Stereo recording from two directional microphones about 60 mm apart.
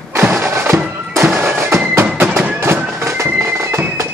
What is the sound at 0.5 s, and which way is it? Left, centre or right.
Music, right.